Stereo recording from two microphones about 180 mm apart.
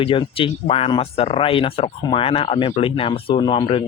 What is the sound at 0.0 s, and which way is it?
Speech, 30° left (ahead or behind).